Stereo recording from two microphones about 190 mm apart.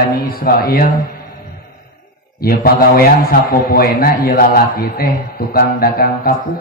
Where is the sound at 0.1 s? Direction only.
50° left (ahead or behind).